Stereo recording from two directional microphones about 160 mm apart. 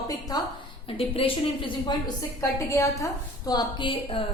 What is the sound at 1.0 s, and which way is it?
Speech, 35° left (ahead or behind).